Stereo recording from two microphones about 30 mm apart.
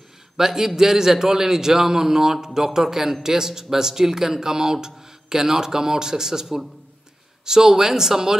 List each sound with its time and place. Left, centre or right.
0.4 s a man's voice: centre
6.4 s a man's voice: centre
7.4 s speech: centre